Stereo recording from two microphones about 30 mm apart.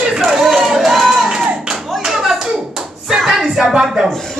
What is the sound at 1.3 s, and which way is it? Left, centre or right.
Clapping, centre.